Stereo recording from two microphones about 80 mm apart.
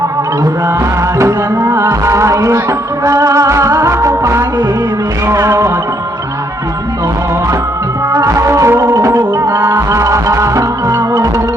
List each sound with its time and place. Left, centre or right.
1.2 s music: right
8.1 s music: right